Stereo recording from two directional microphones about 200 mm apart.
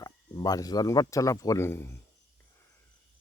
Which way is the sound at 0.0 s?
20° left (ahead or behind).